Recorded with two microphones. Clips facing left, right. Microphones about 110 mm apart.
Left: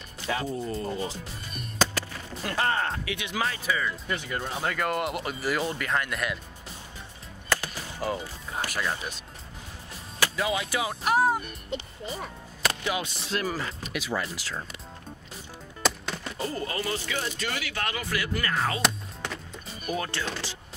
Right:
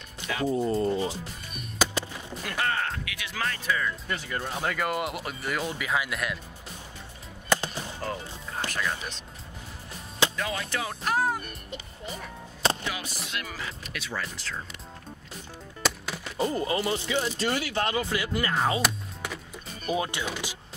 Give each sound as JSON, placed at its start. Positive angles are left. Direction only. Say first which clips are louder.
{"t": 0.5, "sound": "speech", "louder": "right 6 dB", "side_deg": -30}
{"t": 2.0, "sound": "a sound", "louder": "right 1 dB", "side_deg": -15}
{"t": 2.4, "sound": "speech", "louder": "left 2 dB", "side_deg": 35}
{"t": 7.4, "sound": "music", "louder": "right 3 dB", "side_deg": -20}
{"t": 8.0, "sound": "speech", "louder": "left 6 dB", "side_deg": 10}
{"t": 10.3, "sound": "speech", "louder": "left 3 dB", "side_deg": 5}
{"t": 11.2, "sound": "music", "louder": "left 4 dB", "side_deg": 30}
{"t": 12.9, "sound": "speech", "louder": "left 5 dB", "side_deg": 25}
{"t": 13.3, "sound": "speech", "louder": "left 9 dB", "side_deg": 40}
{"t": 13.8, "sound": "speech", "louder": "left 4 dB", "side_deg": 10}
{"t": 15.8, "sound": "music", "louder": "left 2 dB", "side_deg": 0}
{"t": 16.3, "sound": "speech", "louder": "right 6 dB", "side_deg": -20}
{"t": 18.8, "sound": "a sound", "louder": "even", "side_deg": -5}
{"t": 19.9, "sound": "speech", "louder": "right 2 dB", "side_deg": -15}